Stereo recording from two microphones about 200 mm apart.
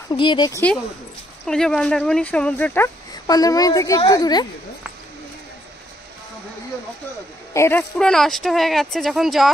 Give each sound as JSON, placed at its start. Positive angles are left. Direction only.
{"t": 0.1, "sound": "speech", "side_deg": 25}
{"t": 1.4, "sound": "speech", "side_deg": 5}
{"t": 7.5, "sound": "speech", "side_deg": 10}